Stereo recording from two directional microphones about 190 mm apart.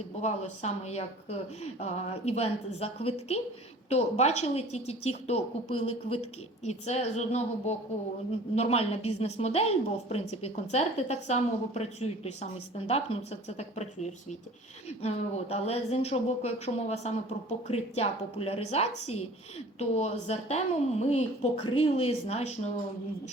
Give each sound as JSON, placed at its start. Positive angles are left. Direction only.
{"t": 0.2, "sound": "speech", "side_deg": 35}